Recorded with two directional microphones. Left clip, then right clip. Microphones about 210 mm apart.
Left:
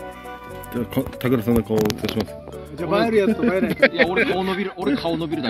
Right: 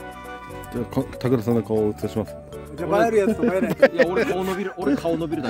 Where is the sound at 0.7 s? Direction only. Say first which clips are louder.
Left 2 dB; 15° right (ahead or behind).